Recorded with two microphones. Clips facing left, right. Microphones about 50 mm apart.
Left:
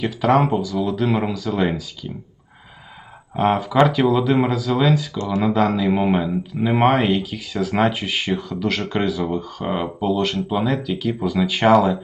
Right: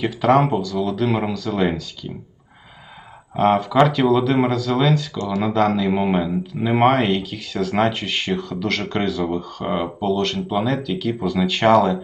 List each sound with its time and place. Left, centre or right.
0.0 s speech: centre
3.3 s speech: centre
5.1 s speech: left
5.4 s speech: centre